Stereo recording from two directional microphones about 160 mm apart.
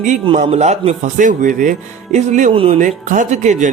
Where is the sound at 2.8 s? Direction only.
50° right (ahead or behind).